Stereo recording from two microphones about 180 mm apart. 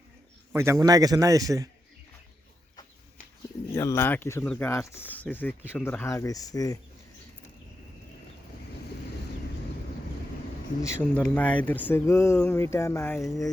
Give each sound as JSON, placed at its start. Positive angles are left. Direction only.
{"t": 0.5, "sound": "a man's voice", "side_deg": -15}
{"t": 3.8, "sound": "speech", "side_deg": 15}
{"t": 11.0, "sound": "speech", "side_deg": 5}